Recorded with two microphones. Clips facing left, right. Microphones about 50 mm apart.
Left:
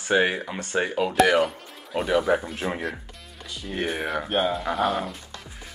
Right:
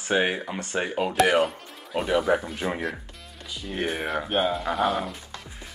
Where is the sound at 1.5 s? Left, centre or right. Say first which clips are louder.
Even; centre.